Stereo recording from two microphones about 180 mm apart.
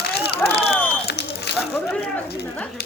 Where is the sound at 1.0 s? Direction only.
65° left (ahead or behind).